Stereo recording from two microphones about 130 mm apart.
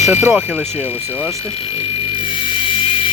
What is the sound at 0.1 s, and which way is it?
Speech, 15° right (ahead or behind).